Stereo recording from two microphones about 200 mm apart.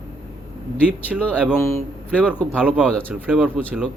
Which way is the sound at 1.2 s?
10° right (ahead or behind).